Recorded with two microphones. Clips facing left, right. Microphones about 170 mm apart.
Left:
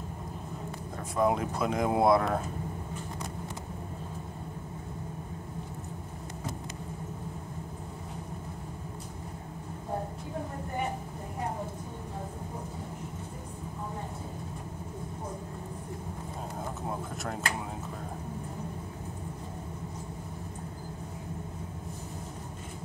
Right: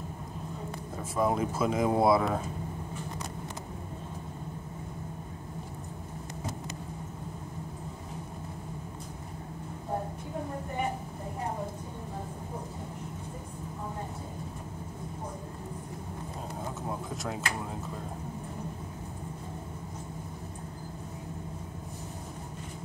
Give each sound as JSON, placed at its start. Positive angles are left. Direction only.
{"t": 1.1, "sound": "speech", "side_deg": 0}